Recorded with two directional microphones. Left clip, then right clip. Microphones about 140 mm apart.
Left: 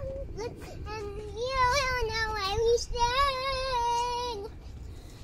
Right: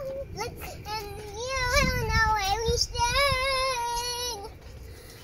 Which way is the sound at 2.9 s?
10° left (ahead or behind).